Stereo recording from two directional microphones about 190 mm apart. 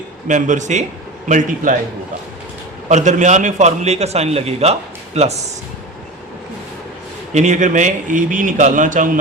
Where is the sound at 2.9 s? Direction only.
40° right (ahead or behind).